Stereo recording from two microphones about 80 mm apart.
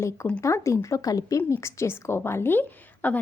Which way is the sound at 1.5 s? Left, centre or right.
Left.